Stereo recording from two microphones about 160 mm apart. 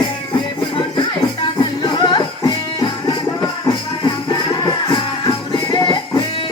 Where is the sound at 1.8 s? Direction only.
25° left (ahead or behind).